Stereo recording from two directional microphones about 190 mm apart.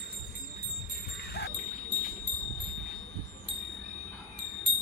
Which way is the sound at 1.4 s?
55° left (ahead or behind).